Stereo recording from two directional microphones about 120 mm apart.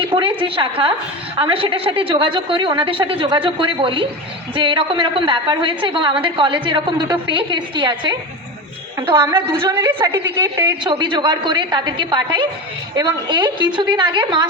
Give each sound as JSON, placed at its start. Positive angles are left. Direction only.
{"t": 0.1, "sound": "a woman's voice", "side_deg": -45}
{"t": 9.2, "sound": "a woman's voice", "side_deg": -20}
{"t": 10.8, "sound": "a woman's voice", "side_deg": -40}